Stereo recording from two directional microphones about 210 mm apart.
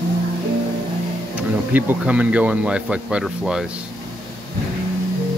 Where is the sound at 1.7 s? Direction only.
10° right (ahead or behind).